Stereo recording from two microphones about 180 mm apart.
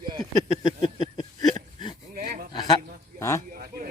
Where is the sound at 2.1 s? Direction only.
50° right (ahead or behind).